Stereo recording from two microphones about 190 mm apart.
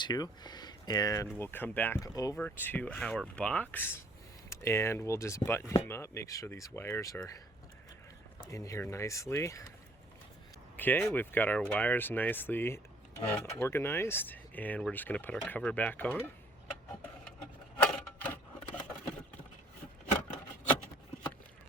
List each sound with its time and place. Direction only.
0.0 s speech: 20° left (ahead or behind)
8.4 s speech: 15° left (ahead or behind)
10.8 s speech: 10° left (ahead or behind)
17.8 s a sound: 5° left (ahead or behind)